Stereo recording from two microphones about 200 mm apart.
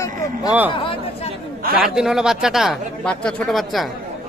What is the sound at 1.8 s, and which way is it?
Speech, 5° right (ahead or behind).